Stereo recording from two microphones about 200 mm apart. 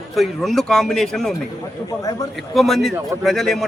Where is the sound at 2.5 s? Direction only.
Centre (ahead or behind).